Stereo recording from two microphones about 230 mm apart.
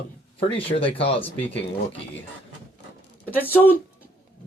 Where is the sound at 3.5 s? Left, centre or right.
Centre.